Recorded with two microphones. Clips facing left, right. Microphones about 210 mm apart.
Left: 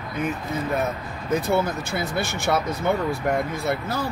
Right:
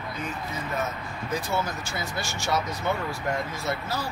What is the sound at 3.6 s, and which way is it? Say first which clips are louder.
Speech: left 5 dB; 55° left (ahead or behind).